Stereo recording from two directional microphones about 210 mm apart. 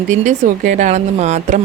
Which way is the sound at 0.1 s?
35° right (ahead or behind).